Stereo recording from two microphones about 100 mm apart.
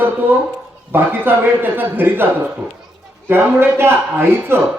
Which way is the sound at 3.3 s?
20° right (ahead or behind).